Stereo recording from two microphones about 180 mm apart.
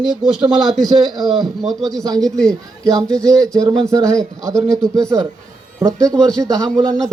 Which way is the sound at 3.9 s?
15° right (ahead or behind).